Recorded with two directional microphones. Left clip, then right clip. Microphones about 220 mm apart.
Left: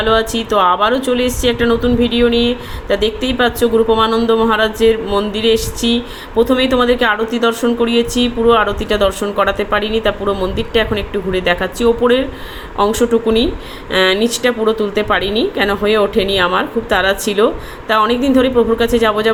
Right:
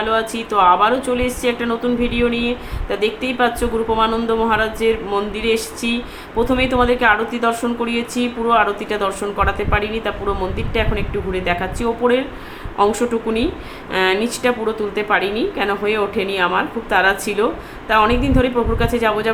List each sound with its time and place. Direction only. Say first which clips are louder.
0.0 s a woman's voice: left 5 dB; 15° left (ahead or behind)
2.3 s speech: left 6 dB; 10° right (ahead or behind)
2.9 s a woman's voice: left 4 dB; 15° left (ahead or behind)